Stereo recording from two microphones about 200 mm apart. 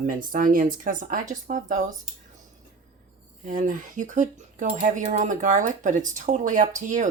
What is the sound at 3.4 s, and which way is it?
Speech, 40° right (ahead or behind).